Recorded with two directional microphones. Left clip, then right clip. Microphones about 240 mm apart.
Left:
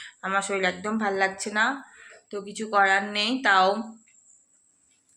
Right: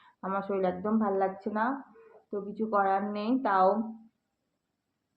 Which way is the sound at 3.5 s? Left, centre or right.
Left.